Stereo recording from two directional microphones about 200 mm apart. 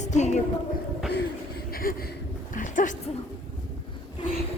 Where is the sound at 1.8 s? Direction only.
45° left (ahead or behind).